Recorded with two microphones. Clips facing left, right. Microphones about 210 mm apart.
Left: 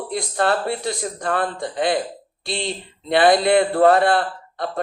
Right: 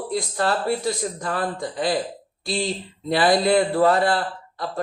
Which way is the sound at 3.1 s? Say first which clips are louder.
Left 3 dB; 65° left (ahead or behind).